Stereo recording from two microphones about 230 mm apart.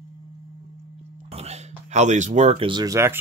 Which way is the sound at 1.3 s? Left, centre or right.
Right.